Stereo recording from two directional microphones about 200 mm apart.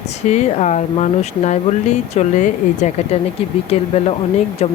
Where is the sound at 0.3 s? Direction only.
35° left (ahead or behind).